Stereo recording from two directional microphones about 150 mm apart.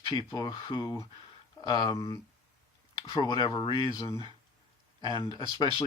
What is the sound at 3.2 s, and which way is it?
Speech, 30° left (ahead or behind).